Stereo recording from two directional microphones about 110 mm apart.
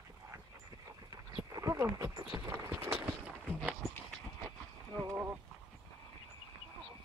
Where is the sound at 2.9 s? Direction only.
10° right (ahead or behind).